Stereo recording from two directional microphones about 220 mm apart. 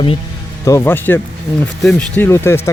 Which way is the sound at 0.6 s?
10° left (ahead or behind).